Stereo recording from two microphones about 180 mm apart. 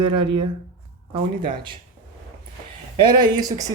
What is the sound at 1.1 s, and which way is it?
Speech, 25° right (ahead or behind).